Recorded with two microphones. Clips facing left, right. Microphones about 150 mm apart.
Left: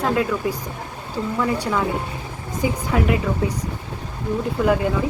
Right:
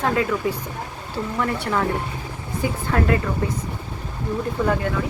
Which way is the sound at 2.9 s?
10° left (ahead or behind).